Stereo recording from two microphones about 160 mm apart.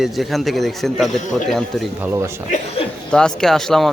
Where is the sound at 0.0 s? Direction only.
Centre (ahead or behind).